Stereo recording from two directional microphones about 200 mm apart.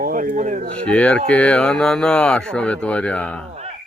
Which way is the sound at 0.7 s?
5° left (ahead or behind).